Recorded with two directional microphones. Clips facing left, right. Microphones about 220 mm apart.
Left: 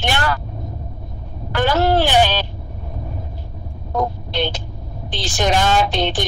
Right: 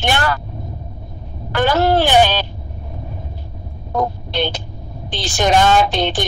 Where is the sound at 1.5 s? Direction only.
50° right (ahead or behind).